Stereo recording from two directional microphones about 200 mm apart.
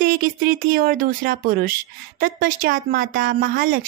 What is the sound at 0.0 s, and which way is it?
Speech, 45° right (ahead or behind).